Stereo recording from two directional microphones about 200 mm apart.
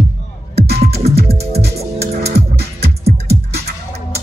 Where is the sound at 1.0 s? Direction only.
30° right (ahead or behind).